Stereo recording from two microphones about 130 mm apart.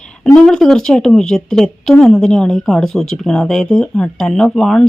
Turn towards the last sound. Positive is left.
turn(degrees=5)  # may be behind; listen again after turning